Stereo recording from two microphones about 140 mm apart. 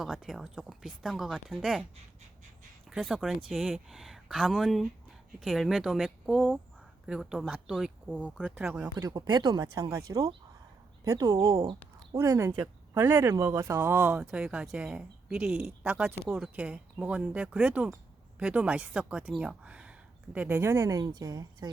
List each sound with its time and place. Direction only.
0.0 s speech: 5° right (ahead or behind)
2.9 s speech: centre (ahead or behind)
8.8 s a woman's voice: 25° right (ahead or behind)
12.1 s a woman's voice: 20° right (ahead or behind)